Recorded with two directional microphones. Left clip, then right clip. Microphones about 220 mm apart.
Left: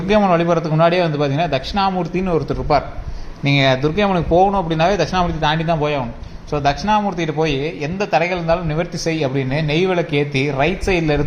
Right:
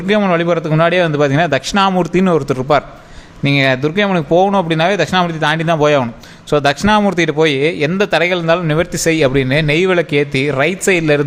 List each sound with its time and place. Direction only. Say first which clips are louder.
0.1 s a man's voice: right 1 dB; 35° right (ahead or behind)